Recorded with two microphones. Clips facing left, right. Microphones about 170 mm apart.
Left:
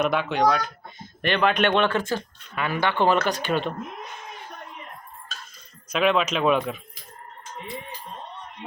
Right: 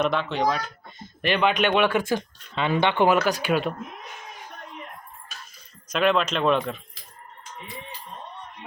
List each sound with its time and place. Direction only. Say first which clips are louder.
0.0 s speech: left 2 dB; 5° left (ahead or behind); by 2.2 s 10° right (ahead or behind)
2.6 s speech: right 2 dB; 20° right (ahead or behind)
3.1 s speech: right 1 dB; 10° right (ahead or behind)
5.9 s speech: even; 5° left (ahead or behind)